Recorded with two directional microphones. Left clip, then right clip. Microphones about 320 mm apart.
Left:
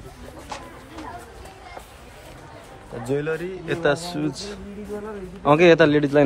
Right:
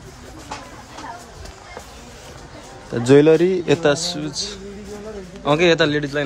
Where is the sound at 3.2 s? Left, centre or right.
Centre.